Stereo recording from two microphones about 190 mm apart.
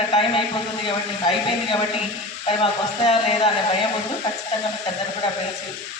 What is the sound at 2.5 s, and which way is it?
Speech, 30° left (ahead or behind).